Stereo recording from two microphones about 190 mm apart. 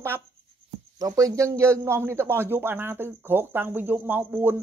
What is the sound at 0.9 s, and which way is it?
Speech, 20° right (ahead or behind).